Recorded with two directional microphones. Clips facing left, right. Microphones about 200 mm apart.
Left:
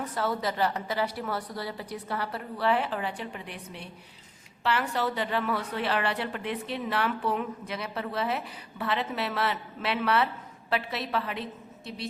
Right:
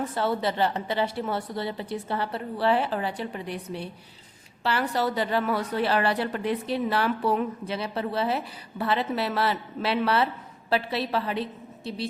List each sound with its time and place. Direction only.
0.2 s a woman's voice: 30° right (ahead or behind)